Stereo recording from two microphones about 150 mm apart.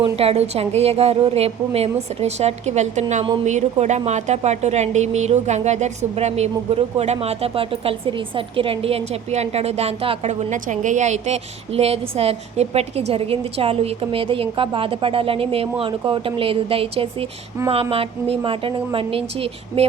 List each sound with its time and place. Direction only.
0.0 s a woman's voice: 40° right (ahead or behind)
10.5 s a woman's voice: 55° right (ahead or behind); by 19.9 s 40° right (ahead or behind)